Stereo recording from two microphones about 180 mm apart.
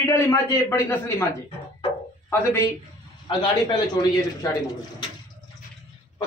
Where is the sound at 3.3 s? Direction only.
25° left (ahead or behind).